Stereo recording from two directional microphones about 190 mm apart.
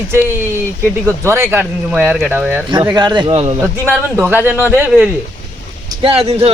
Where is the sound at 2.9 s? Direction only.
25° right (ahead or behind).